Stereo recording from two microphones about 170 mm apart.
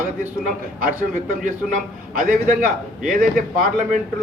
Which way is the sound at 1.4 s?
55° right (ahead or behind).